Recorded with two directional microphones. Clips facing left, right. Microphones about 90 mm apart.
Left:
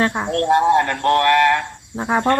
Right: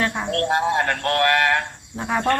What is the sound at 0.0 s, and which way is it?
Cricket, 25° left (ahead or behind).